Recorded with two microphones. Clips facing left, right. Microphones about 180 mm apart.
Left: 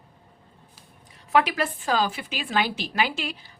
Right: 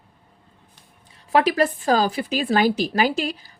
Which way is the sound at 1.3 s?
35° right (ahead or behind).